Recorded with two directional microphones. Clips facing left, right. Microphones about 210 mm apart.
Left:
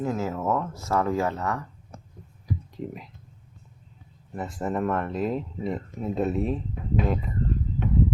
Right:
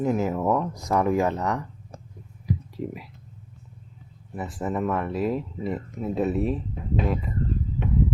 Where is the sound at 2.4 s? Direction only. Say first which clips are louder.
Right 3 dB; 5° right (ahead or behind).